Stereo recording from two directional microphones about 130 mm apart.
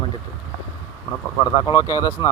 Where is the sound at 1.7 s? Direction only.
30° left (ahead or behind).